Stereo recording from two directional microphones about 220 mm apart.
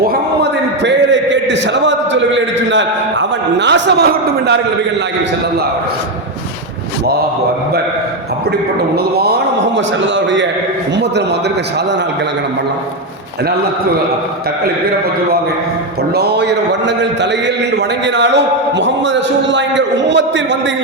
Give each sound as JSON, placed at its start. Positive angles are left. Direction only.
{"t": 0.0, "sound": "a sound", "side_deg": -45}
{"t": 9.1, "sound": "a man's voice", "side_deg": -45}
{"t": 16.1, "sound": "a man's voice", "side_deg": -50}